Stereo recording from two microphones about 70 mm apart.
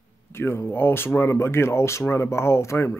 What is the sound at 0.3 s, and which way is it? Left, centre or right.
Speech, left.